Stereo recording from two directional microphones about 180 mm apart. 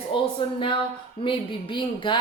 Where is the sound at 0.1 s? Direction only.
30° left (ahead or behind).